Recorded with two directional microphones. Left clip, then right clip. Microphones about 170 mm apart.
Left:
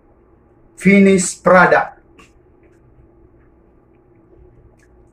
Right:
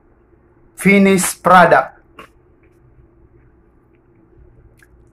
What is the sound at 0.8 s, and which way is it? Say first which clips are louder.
Speech: even; 85° right.